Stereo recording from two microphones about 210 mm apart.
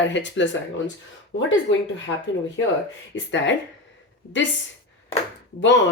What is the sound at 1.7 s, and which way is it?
Speech, 60° left (ahead or behind).